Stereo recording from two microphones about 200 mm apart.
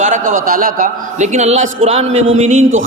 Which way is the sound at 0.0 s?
40° right (ahead or behind).